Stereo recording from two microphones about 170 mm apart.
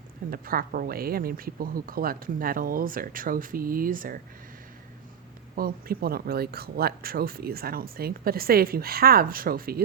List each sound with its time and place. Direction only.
0.3 s speech: 55° right (ahead or behind)
5.5 s speech: 60° right (ahead or behind)